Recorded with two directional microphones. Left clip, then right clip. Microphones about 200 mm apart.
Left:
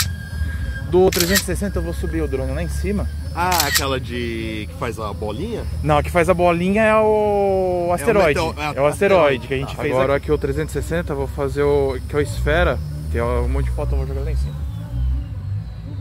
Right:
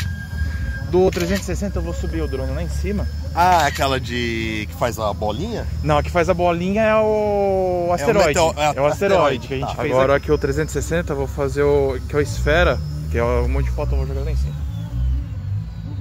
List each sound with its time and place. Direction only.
0.9 s speech: 10° left (ahead or behind)
1.5 s speech: 20° left (ahead or behind)
3.3 s speech: 45° right (ahead or behind)
5.9 s speech: 15° left (ahead or behind)
8.4 s speech: 40° right (ahead or behind)
9.0 s speech: 20° left (ahead or behind)
9.8 s speech: centre (ahead or behind)